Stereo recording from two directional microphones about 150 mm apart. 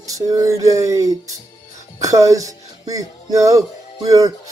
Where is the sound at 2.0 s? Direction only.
20° right (ahead or behind).